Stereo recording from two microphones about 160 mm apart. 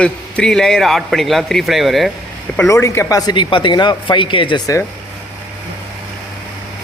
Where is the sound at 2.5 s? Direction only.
15° left (ahead or behind).